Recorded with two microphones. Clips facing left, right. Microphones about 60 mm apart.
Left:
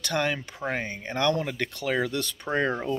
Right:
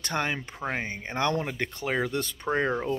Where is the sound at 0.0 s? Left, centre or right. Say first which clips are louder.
Left 2 dB; right.